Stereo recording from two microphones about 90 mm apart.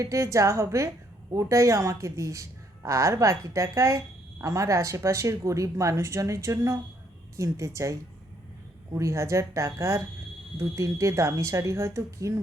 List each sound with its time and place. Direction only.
0.0 s speech: 35° right (ahead or behind)